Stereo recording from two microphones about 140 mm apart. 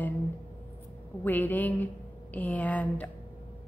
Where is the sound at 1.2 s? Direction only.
15° left (ahead or behind).